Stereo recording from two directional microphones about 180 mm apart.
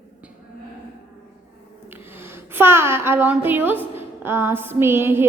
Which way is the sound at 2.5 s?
15° right (ahead or behind).